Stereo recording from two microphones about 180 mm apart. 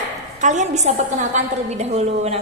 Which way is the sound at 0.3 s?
40° right (ahead or behind).